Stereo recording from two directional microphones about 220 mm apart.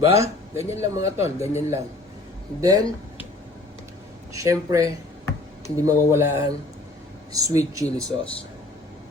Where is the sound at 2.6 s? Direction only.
15° right (ahead or behind).